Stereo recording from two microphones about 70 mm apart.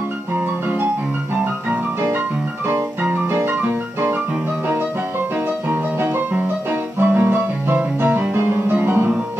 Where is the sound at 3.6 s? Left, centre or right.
Right.